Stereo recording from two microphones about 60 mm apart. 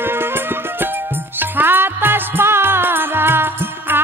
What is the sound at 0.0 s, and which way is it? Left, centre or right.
Music, right.